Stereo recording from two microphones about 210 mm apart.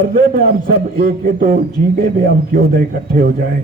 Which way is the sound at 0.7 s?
45° right (ahead or behind).